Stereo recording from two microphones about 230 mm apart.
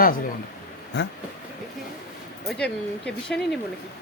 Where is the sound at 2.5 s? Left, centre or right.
Centre.